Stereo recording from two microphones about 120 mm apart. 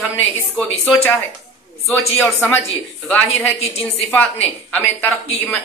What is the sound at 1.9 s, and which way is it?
A man's voice, 20° left (ahead or behind).